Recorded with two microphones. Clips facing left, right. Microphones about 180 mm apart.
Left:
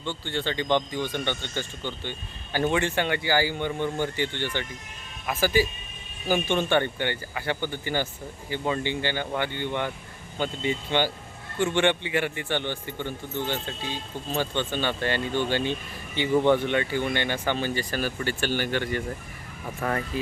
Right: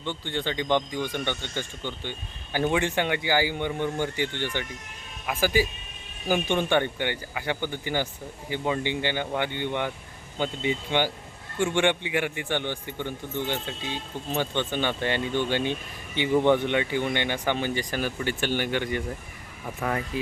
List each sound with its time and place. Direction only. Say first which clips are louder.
0.0 s a man's voice: even; 15° right (ahead or behind)